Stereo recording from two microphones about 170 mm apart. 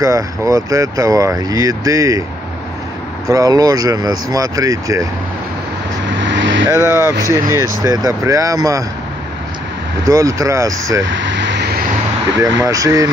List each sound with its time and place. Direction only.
0.0 s speech: 20° right (ahead or behind)
3.3 s speech: 20° right (ahead or behind)
6.0 s vehicle: 90° right
7.2 s speech: 20° right (ahead or behind)
10.0 s speech: 20° right (ahead or behind)
11.0 s speech: 90° right
12.4 s speech: 20° right (ahead or behind)